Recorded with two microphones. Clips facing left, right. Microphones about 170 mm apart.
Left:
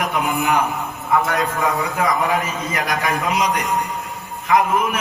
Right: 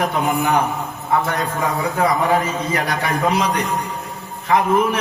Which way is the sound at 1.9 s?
35° right (ahead or behind).